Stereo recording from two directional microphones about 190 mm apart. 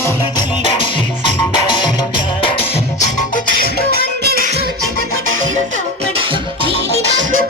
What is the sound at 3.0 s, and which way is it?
Music, 45° left (ahead or behind).